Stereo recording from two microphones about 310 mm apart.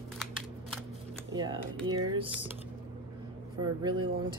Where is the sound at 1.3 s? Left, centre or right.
Centre.